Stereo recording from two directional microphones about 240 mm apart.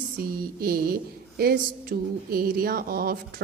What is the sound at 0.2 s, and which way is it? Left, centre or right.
A woman's voice, right.